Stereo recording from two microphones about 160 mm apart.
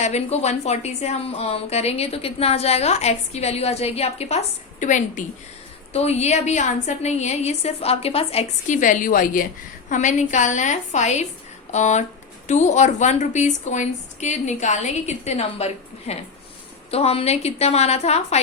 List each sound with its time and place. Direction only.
0.0 s a woman's voice: 45° left (ahead or behind)